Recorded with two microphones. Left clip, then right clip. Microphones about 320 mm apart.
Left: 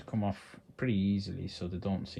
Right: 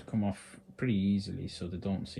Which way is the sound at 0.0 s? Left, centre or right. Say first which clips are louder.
Even; left.